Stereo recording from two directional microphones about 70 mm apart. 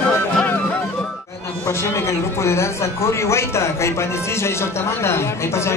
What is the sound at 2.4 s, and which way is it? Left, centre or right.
Speech, left.